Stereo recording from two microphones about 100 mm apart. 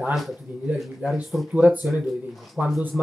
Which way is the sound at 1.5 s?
15° right (ahead or behind).